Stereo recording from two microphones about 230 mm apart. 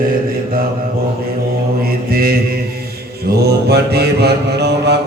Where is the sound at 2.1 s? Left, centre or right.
Right.